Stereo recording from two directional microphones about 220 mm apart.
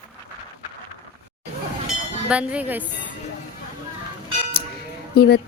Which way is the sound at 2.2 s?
5° right (ahead or behind).